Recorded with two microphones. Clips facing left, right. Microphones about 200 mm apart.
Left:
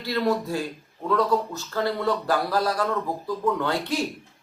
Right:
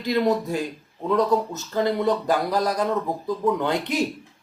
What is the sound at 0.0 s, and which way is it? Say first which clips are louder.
A woman's voice: right 3 dB; 20° right (ahead or behind).